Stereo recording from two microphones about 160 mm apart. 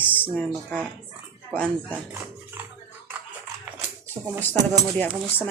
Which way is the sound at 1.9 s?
10° right (ahead or behind).